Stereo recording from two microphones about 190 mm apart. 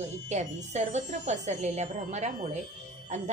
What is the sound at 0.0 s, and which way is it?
A woman's voice, 40° right (ahead or behind).